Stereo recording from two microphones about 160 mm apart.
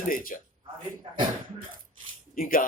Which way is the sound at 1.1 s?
30° right (ahead or behind).